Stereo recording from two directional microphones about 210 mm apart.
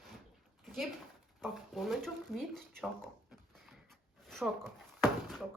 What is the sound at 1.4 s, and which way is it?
Speech, centre (ahead or behind).